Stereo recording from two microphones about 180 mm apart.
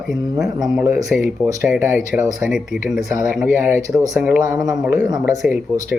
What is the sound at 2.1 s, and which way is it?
Speech, 10° right (ahead or behind).